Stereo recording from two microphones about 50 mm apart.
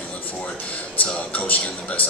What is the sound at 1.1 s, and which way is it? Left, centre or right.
Speech, left.